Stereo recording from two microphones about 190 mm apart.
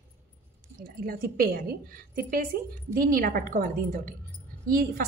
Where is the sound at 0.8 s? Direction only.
50° right (ahead or behind).